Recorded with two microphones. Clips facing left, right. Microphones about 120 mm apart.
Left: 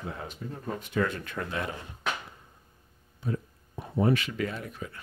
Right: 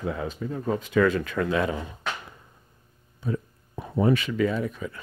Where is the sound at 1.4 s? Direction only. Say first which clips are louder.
Right 7 dB; 90° right.